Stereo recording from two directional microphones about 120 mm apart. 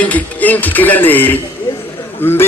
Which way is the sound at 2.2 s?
20° left (ahead or behind).